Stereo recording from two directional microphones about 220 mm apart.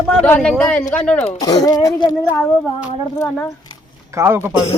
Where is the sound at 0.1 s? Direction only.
5° left (ahead or behind).